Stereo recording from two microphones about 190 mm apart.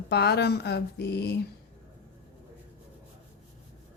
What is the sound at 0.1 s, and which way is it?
Speech, 55° left (ahead or behind).